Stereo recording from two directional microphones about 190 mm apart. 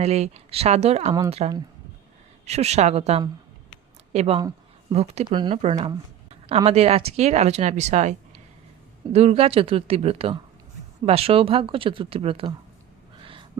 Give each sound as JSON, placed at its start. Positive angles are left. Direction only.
{"t": 0.0, "sound": "speech", "side_deg": -35}
{"t": 4.4, "sound": "a sound", "side_deg": -20}
{"t": 4.9, "sound": "speech", "side_deg": -30}
{"t": 5.6, "sound": "speech", "side_deg": -35}
{"t": 9.1, "sound": "speech", "side_deg": -35}